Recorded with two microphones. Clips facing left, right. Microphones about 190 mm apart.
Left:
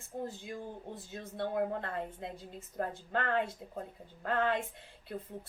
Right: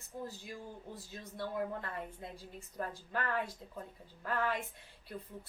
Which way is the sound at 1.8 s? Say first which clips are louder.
Left 5 dB; 25° left (ahead or behind).